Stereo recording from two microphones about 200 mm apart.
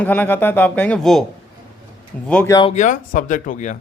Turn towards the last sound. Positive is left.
turn(degrees=40)  # may be behind; listen again after turning